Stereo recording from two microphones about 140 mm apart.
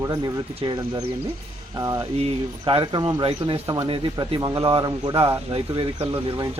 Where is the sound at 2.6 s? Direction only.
35° right (ahead or behind).